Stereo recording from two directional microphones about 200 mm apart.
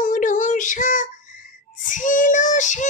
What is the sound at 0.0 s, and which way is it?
Child singing, 40° left (ahead or behind).